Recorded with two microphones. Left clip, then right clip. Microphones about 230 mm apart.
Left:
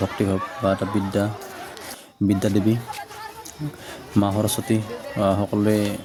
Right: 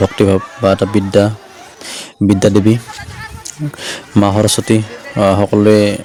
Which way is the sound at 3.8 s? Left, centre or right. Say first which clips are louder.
Right 10 dB; left.